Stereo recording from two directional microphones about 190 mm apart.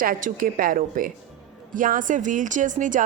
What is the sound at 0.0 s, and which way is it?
A woman's voice, 45° right (ahead or behind).